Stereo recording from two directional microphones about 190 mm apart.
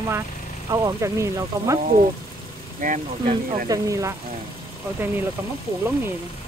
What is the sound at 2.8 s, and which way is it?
Speech, 45° right (ahead or behind).